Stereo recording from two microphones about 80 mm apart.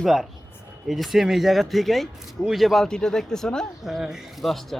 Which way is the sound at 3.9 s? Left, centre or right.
Centre.